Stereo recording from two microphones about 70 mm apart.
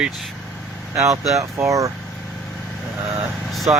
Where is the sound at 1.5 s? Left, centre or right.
Right.